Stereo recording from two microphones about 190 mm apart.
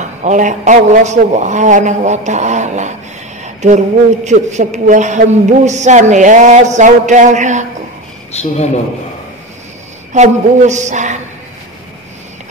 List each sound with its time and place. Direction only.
0.2 s a man's voice: 40° right (ahead or behind)
8.3 s speech: 35° left (ahead or behind)
10.1 s a man's voice: 40° right (ahead or behind)